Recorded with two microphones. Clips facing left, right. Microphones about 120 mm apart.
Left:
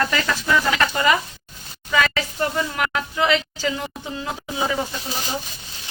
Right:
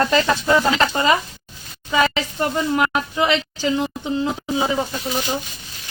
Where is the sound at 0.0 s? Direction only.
30° right (ahead or behind).